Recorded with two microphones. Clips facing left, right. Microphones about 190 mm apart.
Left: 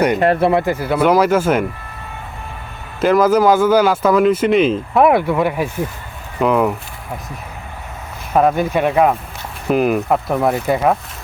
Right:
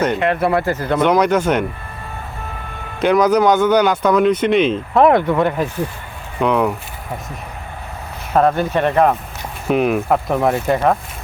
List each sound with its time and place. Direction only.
0.2 s speech: 40° left (ahead or behind)
0.4 s speech: 20° left (ahead or behind)
3.0 s speech: 5° left (ahead or behind)
8.3 s speech: 10° left (ahead or behind)